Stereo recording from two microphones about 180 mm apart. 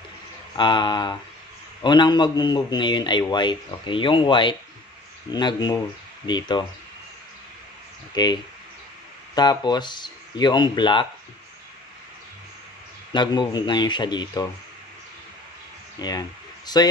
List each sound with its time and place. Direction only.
0.6 s a man's voice: 25° left (ahead or behind)
8.1 s a man's voice: 25° left (ahead or behind)
13.1 s a man's voice: 25° left (ahead or behind)
16.0 s speech: 20° left (ahead or behind)